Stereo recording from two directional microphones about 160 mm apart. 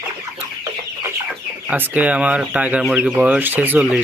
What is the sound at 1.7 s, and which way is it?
Speech, 10° right (ahead or behind).